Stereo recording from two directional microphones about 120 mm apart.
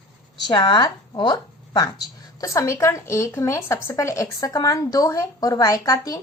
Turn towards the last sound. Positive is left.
turn(degrees=30)  # may be behind; listen again after turning